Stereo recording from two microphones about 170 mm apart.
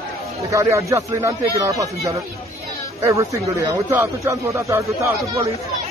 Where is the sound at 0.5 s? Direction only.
15° right (ahead or behind).